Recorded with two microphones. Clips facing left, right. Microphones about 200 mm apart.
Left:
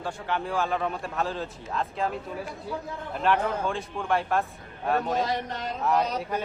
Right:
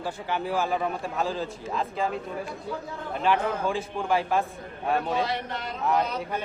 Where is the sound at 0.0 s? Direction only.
5° right (ahead or behind).